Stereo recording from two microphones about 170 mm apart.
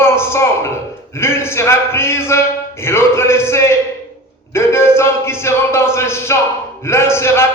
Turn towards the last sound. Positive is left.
turn(degrees=15)  # may be behind; listen again after turning